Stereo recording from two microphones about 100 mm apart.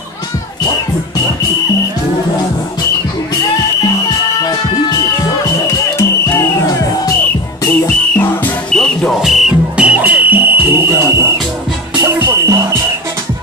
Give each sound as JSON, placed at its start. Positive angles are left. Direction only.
{"t": 4.4, "sound": "music", "side_deg": 35}
{"t": 6.3, "sound": "music", "side_deg": 35}
{"t": 9.2, "sound": "music", "side_deg": -5}